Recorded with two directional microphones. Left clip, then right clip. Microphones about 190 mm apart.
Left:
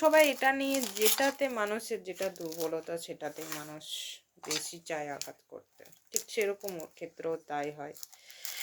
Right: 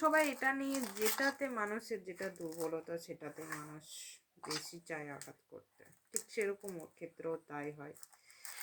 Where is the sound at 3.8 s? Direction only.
55° left (ahead or behind).